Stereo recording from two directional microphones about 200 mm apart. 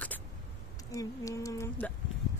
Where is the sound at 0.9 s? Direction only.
15° left (ahead or behind).